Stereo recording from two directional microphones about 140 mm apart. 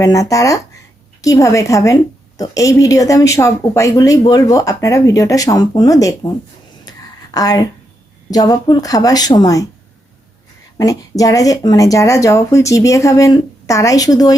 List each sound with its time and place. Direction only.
0.0 s speech: 25° left (ahead or behind)
6.8 s a sound: 25° left (ahead or behind)
8.3 s speech: 25° left (ahead or behind)
10.8 s speech: 25° left (ahead or behind)